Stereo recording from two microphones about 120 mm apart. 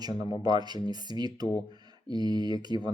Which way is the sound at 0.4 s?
35° right (ahead or behind).